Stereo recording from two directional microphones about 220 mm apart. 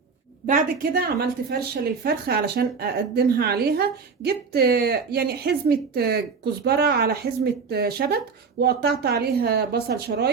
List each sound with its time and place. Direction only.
0.4 s a woman's voice: 35° right (ahead or behind)